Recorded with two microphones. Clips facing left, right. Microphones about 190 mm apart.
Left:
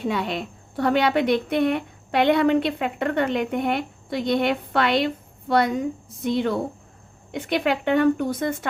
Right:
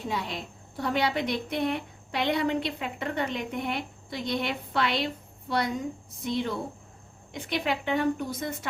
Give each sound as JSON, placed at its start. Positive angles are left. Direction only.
{"t": 0.0, "sound": "a woman's voice", "side_deg": 65}